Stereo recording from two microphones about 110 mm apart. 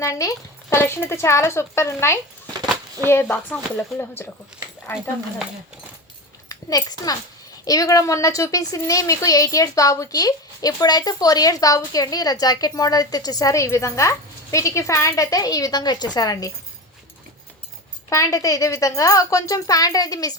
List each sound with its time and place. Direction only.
0.0 s speech: 25° left (ahead or behind)
6.5 s a child's voice: 35° left (ahead or behind)
18.1 s a woman's voice: 30° left (ahead or behind)